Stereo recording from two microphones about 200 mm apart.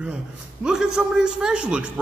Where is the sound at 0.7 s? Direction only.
5° right (ahead or behind).